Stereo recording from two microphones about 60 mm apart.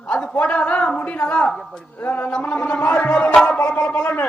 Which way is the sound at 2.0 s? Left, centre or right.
Left.